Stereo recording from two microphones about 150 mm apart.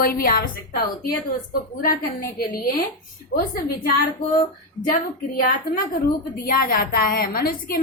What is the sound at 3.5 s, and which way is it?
Speech, 75° left (ahead or behind).